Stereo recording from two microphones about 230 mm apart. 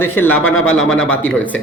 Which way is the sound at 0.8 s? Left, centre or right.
Left.